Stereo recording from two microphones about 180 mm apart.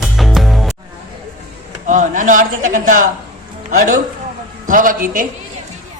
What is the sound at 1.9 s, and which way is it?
Music, 45° right (ahead or behind).